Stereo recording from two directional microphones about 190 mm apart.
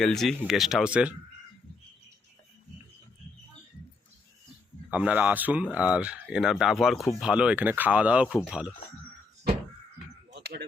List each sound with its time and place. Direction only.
0.0 s speech: centre (ahead or behind)
4.9 s speech: 5° right (ahead or behind)
10.3 s a sound: 60° right (ahead or behind)